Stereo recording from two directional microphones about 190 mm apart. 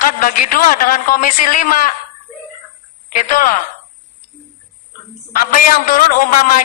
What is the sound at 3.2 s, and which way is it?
Speech, 45° left (ahead or behind).